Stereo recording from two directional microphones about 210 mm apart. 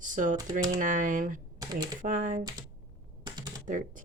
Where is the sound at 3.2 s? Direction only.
20° right (ahead or behind).